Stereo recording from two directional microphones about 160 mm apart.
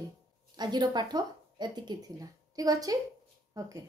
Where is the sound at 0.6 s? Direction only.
25° right (ahead or behind).